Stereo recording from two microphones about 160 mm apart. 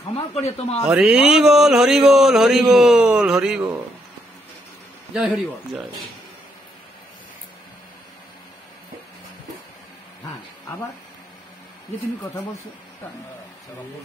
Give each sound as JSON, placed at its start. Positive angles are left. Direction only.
{"t": 0.1, "sound": "a man's voice", "side_deg": 40}
{"t": 0.8, "sound": "speech", "side_deg": -5}
{"t": 5.1, "sound": "speech", "side_deg": -5}